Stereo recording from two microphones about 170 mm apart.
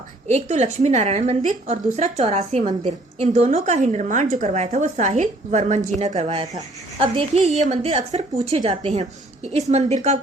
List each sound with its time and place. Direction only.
0.3 s a woman's voice: 45° right (ahead or behind)